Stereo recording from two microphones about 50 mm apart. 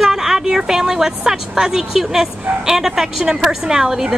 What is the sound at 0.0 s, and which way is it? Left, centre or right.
A woman's voice, centre.